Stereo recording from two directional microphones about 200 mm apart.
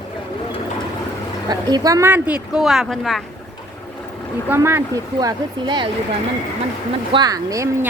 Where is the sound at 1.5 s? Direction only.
20° right (ahead or behind); by 3.2 s centre (ahead or behind).